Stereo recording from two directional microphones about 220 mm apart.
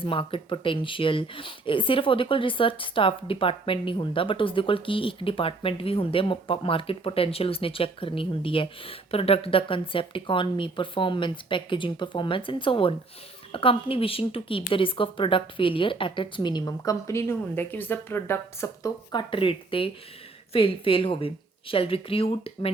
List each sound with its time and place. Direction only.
0.0 s speech: 25° left (ahead or behind)